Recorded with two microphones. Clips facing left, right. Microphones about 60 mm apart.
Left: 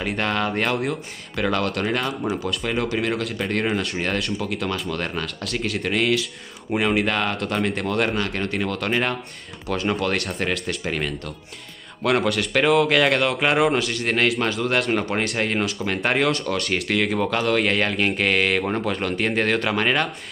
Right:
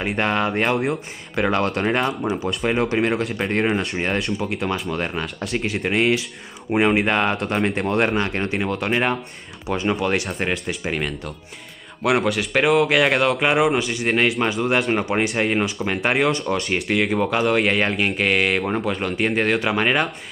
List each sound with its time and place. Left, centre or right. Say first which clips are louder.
0.0 s speech: right 2 dB; centre